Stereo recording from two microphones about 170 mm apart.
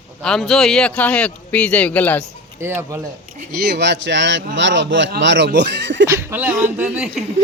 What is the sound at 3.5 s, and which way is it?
Speech, 70° right (ahead or behind).